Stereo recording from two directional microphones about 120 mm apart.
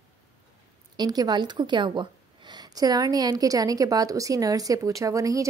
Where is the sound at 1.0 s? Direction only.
35° right (ahead or behind).